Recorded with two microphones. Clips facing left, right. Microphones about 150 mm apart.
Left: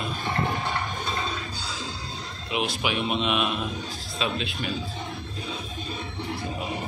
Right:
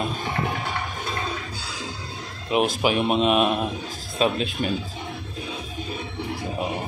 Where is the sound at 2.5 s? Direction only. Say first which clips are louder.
Right 7 dB; 45° right (ahead or behind).